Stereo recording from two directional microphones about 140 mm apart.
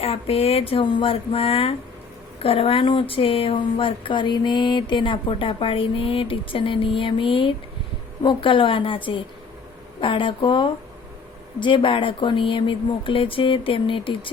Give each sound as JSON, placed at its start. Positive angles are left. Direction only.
{"t": 0.0, "sound": "speech", "side_deg": 45}